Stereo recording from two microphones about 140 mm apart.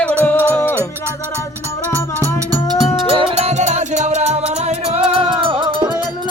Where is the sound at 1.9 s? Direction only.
25° right (ahead or behind).